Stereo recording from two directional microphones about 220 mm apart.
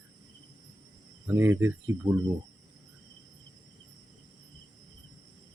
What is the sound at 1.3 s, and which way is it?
Speech, 10° right (ahead or behind).